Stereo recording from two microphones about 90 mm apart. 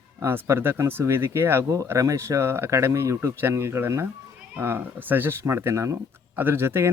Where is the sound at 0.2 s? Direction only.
30° right (ahead or behind).